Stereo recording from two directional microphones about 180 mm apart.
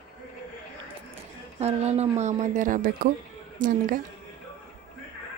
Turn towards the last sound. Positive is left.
turn(degrees=-45)  # may be behind; listen again after turning